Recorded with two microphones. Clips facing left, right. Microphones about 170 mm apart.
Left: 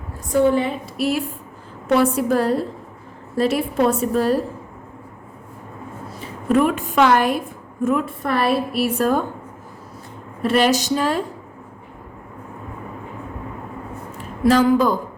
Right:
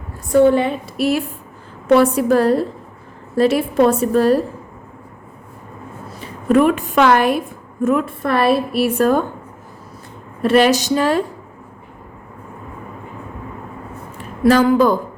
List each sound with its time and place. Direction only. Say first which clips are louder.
0.5 s a woman's voice: right 3 dB; 70° right (ahead or behind)
6.5 s a woman's voice: right 4 dB; 70° right (ahead or behind)
10.4 s a woman's voice: right 4 dB; 70° right (ahead or behind)
14.4 s a woman's voice: right 3 dB; 65° right (ahead or behind)